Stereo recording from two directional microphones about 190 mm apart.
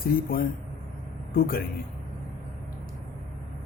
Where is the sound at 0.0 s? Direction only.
50° left (ahead or behind).